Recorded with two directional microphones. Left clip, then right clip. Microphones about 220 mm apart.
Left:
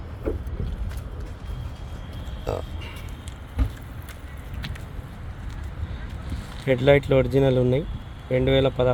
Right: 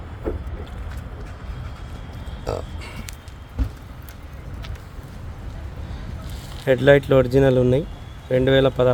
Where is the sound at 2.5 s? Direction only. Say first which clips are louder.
Right 2 dB; centre (ahead or behind).